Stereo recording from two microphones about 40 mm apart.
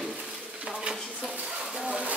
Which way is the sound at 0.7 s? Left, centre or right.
Right.